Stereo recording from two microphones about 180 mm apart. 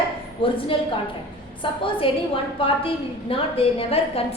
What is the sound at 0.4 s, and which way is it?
Speech, 30° left (ahead or behind).